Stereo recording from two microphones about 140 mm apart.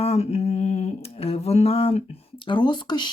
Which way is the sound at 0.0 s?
50° left (ahead or behind).